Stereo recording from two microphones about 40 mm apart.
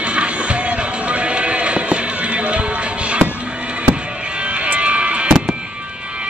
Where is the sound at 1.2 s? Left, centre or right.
Right.